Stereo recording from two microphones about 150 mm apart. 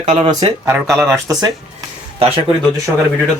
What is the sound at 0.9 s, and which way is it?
Speech, centre (ahead or behind).